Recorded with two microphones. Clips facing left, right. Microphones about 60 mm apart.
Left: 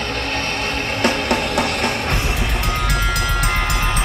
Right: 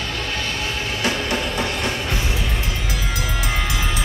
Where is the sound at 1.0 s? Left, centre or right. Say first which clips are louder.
Left 4 dB; left.